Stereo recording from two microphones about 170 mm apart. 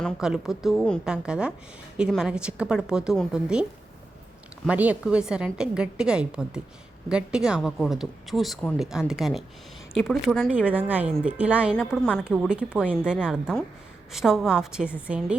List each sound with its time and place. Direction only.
0.0 s a woman's voice: 5° right (ahead or behind)
11.7 s a woman's voice: 5° left (ahead or behind)